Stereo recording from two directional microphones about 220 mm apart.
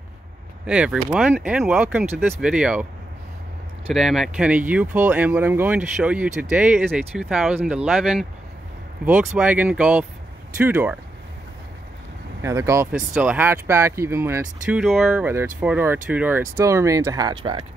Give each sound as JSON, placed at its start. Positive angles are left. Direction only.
{"t": 0.7, "sound": "speech", "side_deg": -5}
{"t": 12.4, "sound": "speech", "side_deg": -15}